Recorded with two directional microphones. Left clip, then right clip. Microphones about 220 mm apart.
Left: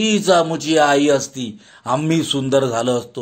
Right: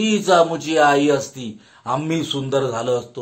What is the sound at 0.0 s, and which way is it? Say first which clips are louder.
Speech: even; 40° left (ahead or behind).